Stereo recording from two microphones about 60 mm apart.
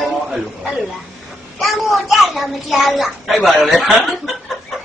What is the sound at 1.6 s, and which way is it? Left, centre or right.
A woman's voice, centre.